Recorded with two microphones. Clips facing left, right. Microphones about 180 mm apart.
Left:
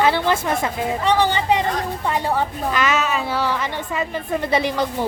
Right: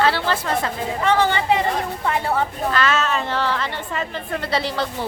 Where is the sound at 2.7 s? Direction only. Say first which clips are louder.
Even; 15° left (ahead or behind).